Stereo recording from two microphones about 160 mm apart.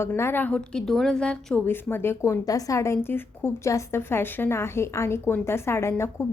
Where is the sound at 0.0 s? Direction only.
15° left (ahead or behind).